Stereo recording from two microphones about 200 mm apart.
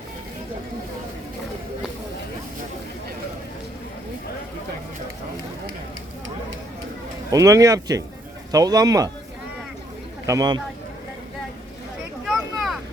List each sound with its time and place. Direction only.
7.3 s speech: 15° right (ahead or behind)
10.2 s speech: 20° right (ahead or behind)
12.2 s a sound: centre (ahead or behind)